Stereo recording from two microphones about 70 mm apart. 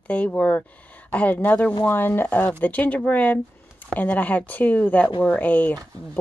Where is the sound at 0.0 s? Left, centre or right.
Left.